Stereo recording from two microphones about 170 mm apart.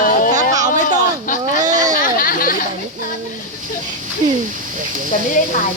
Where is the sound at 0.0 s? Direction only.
55° left (ahead or behind).